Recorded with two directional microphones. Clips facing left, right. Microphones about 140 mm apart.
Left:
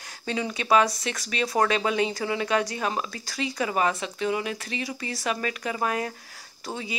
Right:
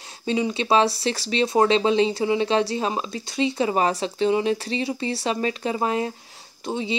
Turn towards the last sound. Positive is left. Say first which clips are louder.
# right 7 dB
turn(degrees=-20)  # may be behind; listen again after turning